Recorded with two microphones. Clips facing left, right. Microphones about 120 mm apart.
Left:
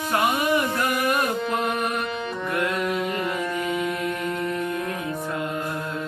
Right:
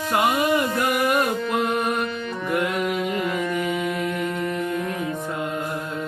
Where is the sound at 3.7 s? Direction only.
25° left (ahead or behind).